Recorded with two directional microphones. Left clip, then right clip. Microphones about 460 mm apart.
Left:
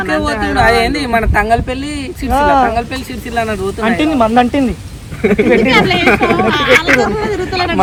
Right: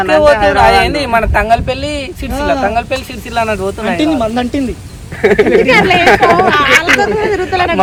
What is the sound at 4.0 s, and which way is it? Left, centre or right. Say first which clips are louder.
Speech: left 4 dB; centre.